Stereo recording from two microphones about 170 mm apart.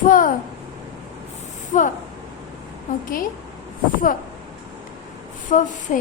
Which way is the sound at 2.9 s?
50° left (ahead or behind).